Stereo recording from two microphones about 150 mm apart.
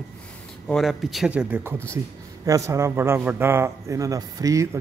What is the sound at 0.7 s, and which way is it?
Speech, centre (ahead or behind).